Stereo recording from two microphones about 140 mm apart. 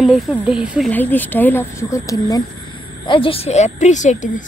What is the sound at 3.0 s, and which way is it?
Speech, 40° left (ahead or behind).